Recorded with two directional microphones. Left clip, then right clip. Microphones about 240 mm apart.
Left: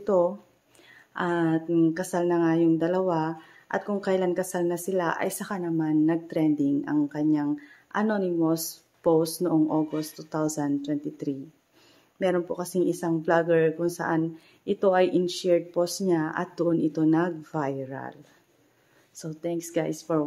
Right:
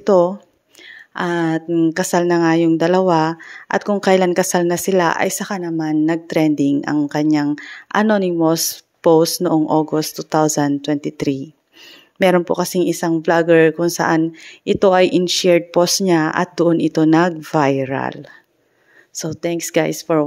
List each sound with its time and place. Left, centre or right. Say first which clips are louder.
0.0 s speech: right 10 dB; right
19.4 s speech: right 10 dB; right